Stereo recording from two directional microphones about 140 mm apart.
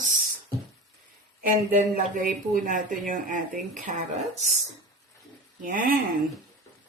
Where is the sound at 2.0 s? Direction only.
75° right (ahead or behind); by 4.4 s 60° right (ahead or behind).